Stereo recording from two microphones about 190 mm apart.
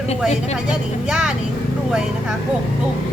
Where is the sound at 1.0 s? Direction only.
5° right (ahead or behind).